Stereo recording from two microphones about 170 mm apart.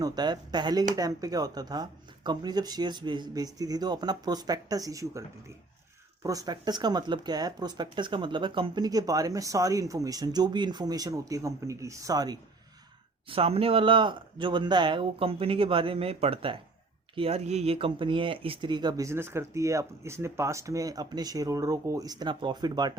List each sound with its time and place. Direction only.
0.0 s speech: 25° right (ahead or behind)
6.2 s speech: 20° right (ahead or behind)
13.2 s speech: 35° right (ahead or behind)